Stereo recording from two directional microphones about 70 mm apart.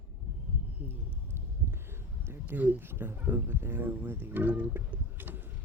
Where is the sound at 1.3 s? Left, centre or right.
Right.